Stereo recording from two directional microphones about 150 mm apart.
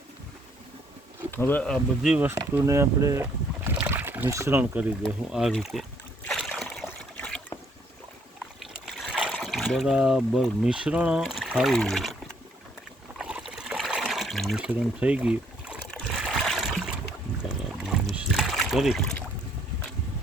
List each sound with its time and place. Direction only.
1.3 s insect: 15° left (ahead or behind)
2.0 s speech: 10° right (ahead or behind)
3.8 s boat: 10° right (ahead or behind)
5.0 s speech: centre (ahead or behind)
6.2 s a sound: 5° left (ahead or behind)
6.8 s trickle: 5° left (ahead or behind)
8.9 s speech: centre (ahead or behind)
13.1 s trickle: 5° right (ahead or behind)
16.0 s a sound: centre (ahead or behind)
17.8 s splash: 5° right (ahead or behind)